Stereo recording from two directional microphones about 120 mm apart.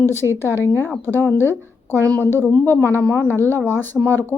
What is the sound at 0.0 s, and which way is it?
Speech, 20° left (ahead or behind).